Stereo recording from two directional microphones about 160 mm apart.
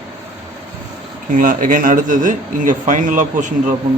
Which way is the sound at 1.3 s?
55° right (ahead or behind).